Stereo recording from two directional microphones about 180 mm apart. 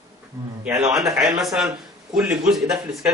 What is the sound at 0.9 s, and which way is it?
A man's voice, 5° right (ahead or behind).